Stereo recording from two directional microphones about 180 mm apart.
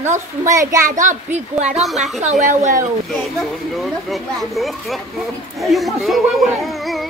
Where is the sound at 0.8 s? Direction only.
45° right (ahead or behind).